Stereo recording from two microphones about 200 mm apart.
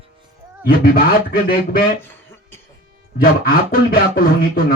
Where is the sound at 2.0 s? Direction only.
10° left (ahead or behind).